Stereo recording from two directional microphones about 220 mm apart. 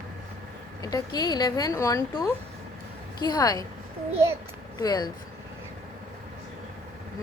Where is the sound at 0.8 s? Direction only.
15° left (ahead or behind).